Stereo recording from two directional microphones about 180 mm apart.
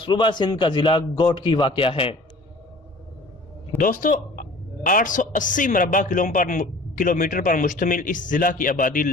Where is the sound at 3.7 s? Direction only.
50° left (ahead or behind).